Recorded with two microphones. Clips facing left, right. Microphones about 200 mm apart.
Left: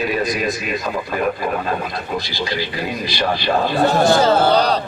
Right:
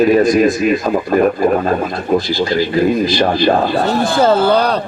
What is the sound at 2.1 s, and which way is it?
Speech, 50° right (ahead or behind).